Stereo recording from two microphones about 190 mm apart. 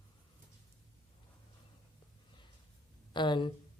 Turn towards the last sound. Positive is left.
turn(degrees=25)  # may be behind; listen again after turning